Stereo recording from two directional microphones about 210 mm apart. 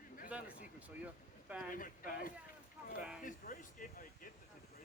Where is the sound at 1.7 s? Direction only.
40° left (ahead or behind).